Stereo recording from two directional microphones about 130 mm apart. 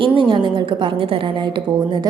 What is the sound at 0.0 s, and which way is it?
A woman's voice, 40° right (ahead or behind).